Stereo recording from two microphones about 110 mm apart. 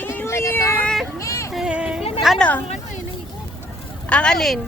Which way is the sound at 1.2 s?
30° left (ahead or behind).